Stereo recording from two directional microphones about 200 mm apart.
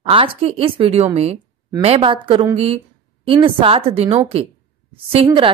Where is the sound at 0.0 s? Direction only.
30° right (ahead or behind).